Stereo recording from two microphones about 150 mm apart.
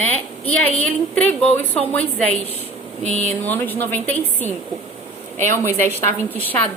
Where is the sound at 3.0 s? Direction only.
50° left (ahead or behind).